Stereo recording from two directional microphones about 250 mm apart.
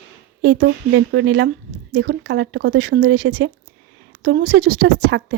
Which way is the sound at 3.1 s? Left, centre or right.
Right.